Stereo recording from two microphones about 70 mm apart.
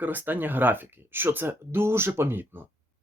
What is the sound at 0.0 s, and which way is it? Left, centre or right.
Speech, right.